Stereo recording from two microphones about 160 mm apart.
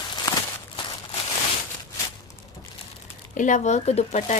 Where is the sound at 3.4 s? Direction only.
50° left (ahead or behind).